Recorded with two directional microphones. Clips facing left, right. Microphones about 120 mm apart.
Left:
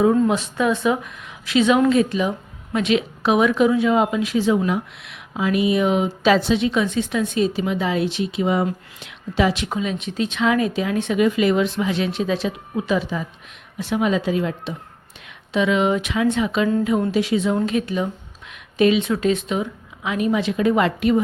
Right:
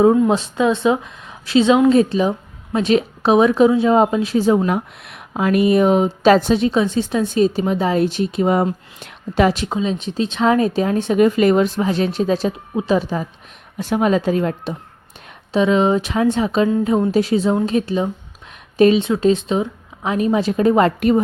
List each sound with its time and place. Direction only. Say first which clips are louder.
0.3 s a woman's voice: right 3 dB; 30° right (ahead or behind)
9.6 s speech: right 4 dB; 25° right (ahead or behind)